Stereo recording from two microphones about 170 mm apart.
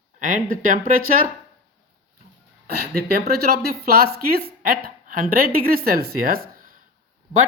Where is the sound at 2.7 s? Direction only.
65° right (ahead or behind).